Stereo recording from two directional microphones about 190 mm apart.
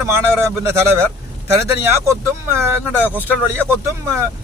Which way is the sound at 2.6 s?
10° right (ahead or behind).